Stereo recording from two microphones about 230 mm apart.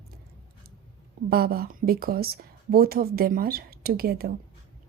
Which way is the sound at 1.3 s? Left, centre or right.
Right.